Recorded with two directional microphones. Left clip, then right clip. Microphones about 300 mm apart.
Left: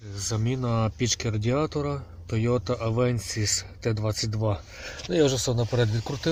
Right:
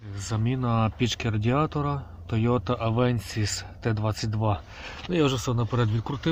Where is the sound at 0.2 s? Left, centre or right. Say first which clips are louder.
Left 1 dB; centre.